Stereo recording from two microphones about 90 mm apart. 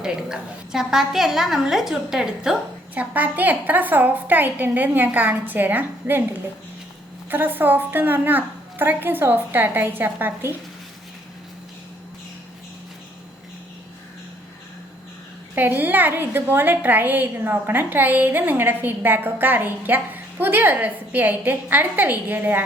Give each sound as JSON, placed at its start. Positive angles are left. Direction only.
{"t": 0.0, "sound": "a woman's voice", "side_deg": -5}
{"t": 2.9, "sound": "a woman's voice", "side_deg": -20}
{"t": 7.3, "sound": "a woman's voice", "side_deg": -20}
{"t": 15.5, "sound": "a woman's voice", "side_deg": -20}